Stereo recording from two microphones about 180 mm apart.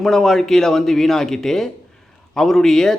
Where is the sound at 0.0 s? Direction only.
Centre (ahead or behind).